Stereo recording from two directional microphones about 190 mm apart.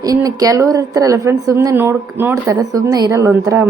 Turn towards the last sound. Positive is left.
turn(degrees=-15)  # may be behind; listen again after turning